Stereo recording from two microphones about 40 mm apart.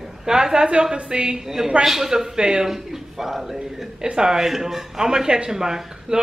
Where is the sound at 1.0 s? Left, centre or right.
Right.